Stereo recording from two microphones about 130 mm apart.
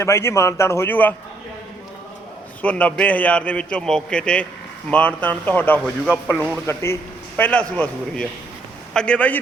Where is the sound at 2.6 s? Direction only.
10° left (ahead or behind).